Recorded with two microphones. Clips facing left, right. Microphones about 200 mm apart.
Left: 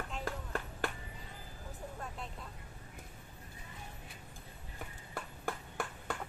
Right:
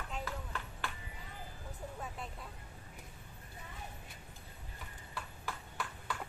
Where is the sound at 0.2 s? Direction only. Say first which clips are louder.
Left 3 dB; 45° left (ahead or behind).